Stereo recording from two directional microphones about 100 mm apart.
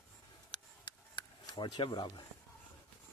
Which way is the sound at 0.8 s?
45° left (ahead or behind).